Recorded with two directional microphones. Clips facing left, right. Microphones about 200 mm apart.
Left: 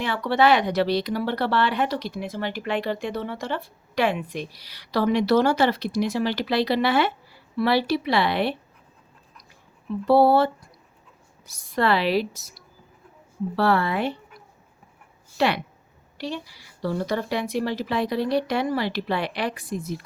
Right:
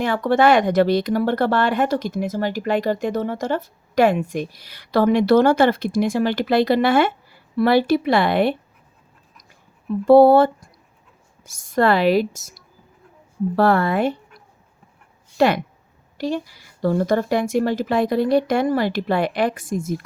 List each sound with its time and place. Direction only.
0.0 s speech: 50° right (ahead or behind)
10.1 s speech: 50° right (ahead or behind)
13.6 s speech: 45° right (ahead or behind)
15.4 s speech: 45° right (ahead or behind)